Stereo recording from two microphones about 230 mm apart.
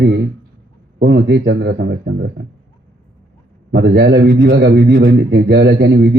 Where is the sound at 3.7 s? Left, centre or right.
Right.